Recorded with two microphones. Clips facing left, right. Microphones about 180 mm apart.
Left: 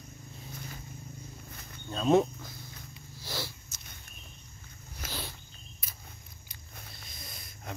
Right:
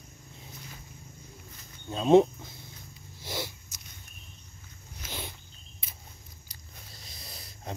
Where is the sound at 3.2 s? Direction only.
20° right (ahead or behind).